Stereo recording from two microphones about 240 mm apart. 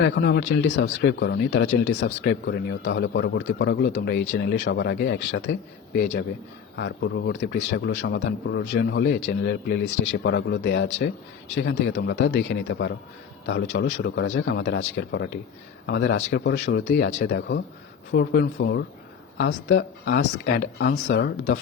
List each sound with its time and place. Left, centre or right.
0.0 s a man's voice: left
6.7 s a man's voice: left